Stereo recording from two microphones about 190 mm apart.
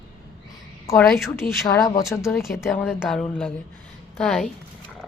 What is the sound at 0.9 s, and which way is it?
Speech, centre (ahead or behind).